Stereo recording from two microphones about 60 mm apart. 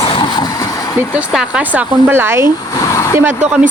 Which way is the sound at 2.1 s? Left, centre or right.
Right.